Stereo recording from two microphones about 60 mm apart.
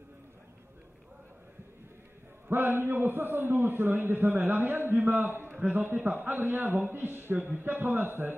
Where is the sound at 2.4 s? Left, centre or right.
Right.